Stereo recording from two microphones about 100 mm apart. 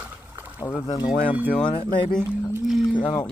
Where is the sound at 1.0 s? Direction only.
15° right (ahead or behind).